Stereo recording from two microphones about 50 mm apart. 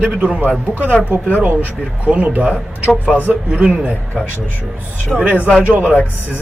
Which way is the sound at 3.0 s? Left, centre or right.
Left.